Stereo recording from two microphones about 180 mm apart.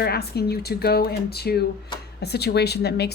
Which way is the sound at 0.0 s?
60° left (ahead or behind).